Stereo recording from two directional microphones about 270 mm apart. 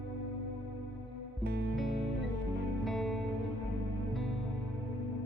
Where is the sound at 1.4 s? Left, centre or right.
Right.